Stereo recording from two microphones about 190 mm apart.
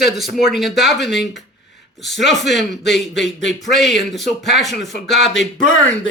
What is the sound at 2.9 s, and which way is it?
Speech, centre (ahead or behind).